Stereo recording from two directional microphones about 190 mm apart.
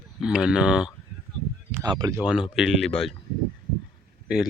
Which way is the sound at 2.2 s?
5° right (ahead or behind).